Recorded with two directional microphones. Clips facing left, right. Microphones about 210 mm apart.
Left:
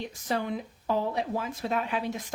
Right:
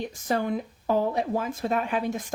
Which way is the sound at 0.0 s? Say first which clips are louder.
Right 4 dB; 45° right (ahead or behind).